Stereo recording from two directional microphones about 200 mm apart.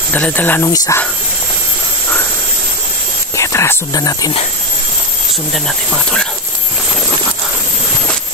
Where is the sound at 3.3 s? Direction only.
15° left (ahead or behind).